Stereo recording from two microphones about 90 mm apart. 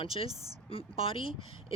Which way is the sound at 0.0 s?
85° left.